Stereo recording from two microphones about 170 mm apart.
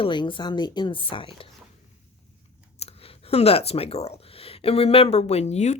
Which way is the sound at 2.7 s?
35° left (ahead or behind).